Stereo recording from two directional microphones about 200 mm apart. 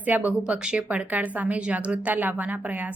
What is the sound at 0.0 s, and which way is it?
A woman's voice, 10° right (ahead or behind).